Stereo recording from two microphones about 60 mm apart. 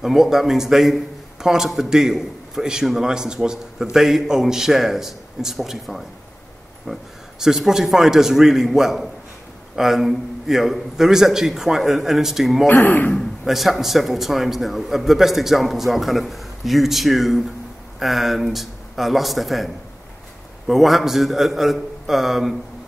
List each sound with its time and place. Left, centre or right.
0.0 s a man's voice: centre
12.6 s speech: left
13.1 s speech: centre
13.5 s a man's voice: centre